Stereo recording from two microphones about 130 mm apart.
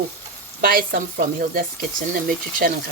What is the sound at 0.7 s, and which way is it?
Speech, 90° right.